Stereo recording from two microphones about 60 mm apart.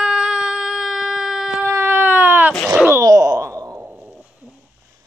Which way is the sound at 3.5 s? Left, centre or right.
Right.